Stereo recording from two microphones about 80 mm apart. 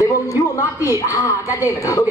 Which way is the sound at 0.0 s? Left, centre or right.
Left.